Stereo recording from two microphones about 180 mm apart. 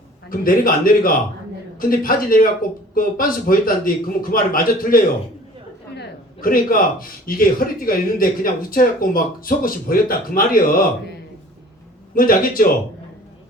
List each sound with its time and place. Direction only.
0.3 s a man's voice: 50° left (ahead or behind)
12.1 s a man's voice: 50° left (ahead or behind)